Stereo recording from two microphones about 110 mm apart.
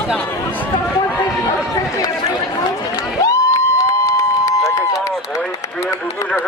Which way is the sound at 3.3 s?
30° left (ahead or behind).